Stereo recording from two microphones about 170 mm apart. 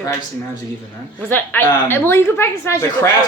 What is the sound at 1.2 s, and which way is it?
Speech, 10° left (ahead or behind).